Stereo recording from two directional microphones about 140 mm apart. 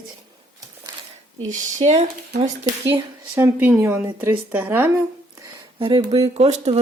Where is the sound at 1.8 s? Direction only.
55° right (ahead or behind).